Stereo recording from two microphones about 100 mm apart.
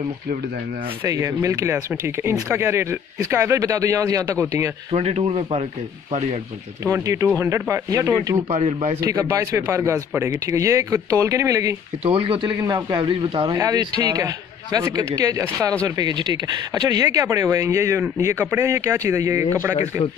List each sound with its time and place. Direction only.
1.0 s speech: 35° right (ahead or behind)
4.9 s speech: 85° right
6.8 s speech: 30° right (ahead or behind)
9.7 s speech: 30° right (ahead or behind)
12.0 s speech: 65° right (ahead or behind)
12.5 s a man's voice: 40° right (ahead or behind); by 13.5 s 60° right (ahead or behind)
13.6 s a man's voice: 40° right (ahead or behind)